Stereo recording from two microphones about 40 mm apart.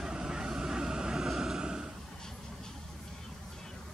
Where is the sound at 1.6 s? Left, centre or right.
Centre.